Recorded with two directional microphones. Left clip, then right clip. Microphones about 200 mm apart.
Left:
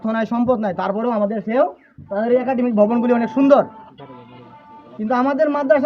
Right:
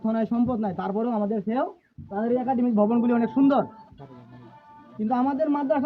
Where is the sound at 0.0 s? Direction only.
10° left (ahead or behind).